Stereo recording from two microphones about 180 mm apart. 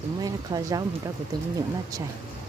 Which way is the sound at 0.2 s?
20° right (ahead or behind).